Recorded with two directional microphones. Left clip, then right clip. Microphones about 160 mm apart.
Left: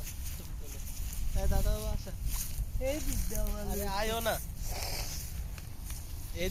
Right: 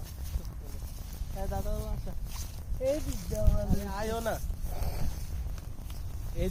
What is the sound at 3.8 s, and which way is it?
Speech, 65° right (ahead or behind).